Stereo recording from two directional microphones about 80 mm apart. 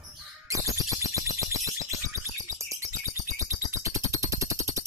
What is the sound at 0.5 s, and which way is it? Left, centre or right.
Crow, right.